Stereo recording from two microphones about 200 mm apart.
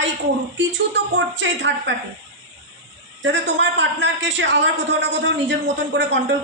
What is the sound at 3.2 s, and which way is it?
A man's voice, 65° right (ahead or behind).